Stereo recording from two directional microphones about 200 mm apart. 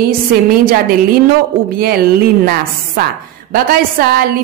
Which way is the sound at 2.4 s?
50° right (ahead or behind).